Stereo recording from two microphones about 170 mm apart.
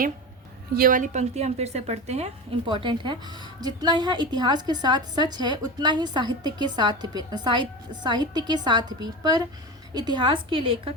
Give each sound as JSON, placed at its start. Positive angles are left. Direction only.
{"t": 0.7, "sound": "a woman's voice", "side_deg": -55}
{"t": 2.6, "sound": "a woman's voice", "side_deg": -30}